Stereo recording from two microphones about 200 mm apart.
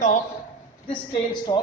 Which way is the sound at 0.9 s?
20° left (ahead or behind).